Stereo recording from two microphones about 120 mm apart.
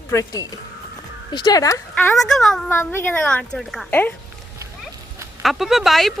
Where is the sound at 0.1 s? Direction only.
25° left (ahead or behind).